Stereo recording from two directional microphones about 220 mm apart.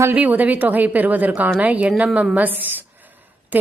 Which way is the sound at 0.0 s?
10° right (ahead or behind).